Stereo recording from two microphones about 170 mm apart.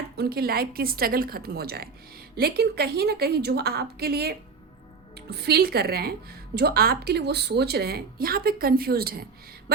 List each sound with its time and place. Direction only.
0.2 s a woman's voice: 65° right (ahead or behind)